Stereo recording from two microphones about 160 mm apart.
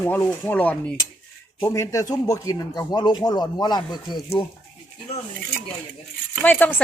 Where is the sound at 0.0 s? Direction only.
10° left (ahead or behind); by 4.4 s 25° left (ahead or behind).